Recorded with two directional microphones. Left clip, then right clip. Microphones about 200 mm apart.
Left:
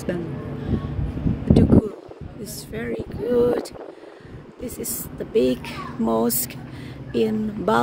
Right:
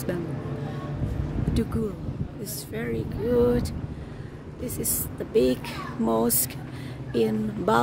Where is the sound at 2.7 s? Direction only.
Centre (ahead or behind).